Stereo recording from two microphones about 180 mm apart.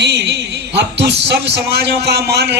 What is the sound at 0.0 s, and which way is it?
A man's voice, 70° right (ahead or behind).